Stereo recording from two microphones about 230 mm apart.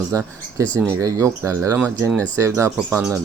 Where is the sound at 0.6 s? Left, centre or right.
Centre.